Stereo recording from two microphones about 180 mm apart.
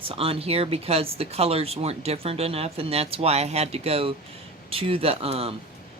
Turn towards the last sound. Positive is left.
turn(degrees=-35)  # may be behind; listen again after turning